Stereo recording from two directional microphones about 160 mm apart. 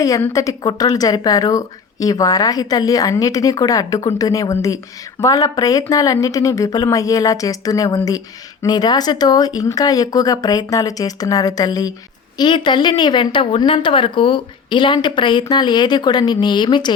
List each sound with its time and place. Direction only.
0.0 s a woman's voice: 20° left (ahead or behind)